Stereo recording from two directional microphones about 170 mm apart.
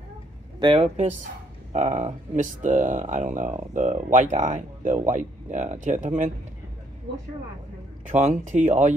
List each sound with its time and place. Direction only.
0.6 s speech: 30° right (ahead or behind)
1.7 s speech: 45° right (ahead or behind)
8.2 s speech: 45° right (ahead or behind)